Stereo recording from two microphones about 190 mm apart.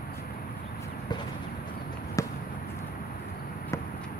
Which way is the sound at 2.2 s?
15° left (ahead or behind).